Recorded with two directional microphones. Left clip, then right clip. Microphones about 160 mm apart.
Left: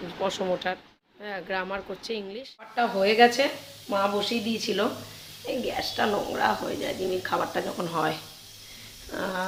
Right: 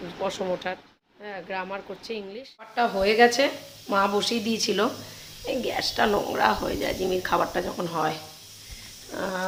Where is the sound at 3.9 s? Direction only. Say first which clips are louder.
Right 2 dB; 25° right (ahead or behind).